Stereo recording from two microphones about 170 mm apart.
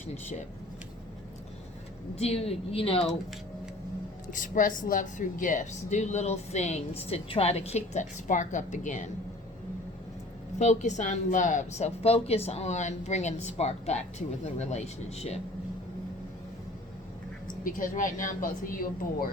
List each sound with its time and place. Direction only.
2.1 s a woman's voice: 35° left (ahead or behind)
4.3 s speech: 50° left (ahead or behind)
10.6 s a woman's voice: 45° left (ahead or behind)
17.6 s speech: 55° left (ahead or behind)